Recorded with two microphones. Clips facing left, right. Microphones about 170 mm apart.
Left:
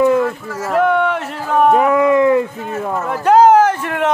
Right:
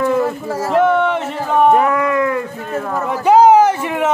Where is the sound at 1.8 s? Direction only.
20° left (ahead or behind).